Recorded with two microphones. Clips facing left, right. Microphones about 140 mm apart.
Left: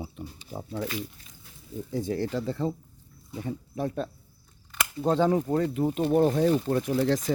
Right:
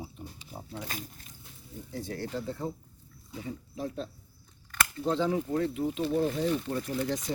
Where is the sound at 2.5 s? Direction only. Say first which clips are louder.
Left 6 dB; 90° left.